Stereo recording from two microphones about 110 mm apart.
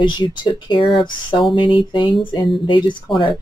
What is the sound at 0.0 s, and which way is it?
Speech, 45° left (ahead or behind).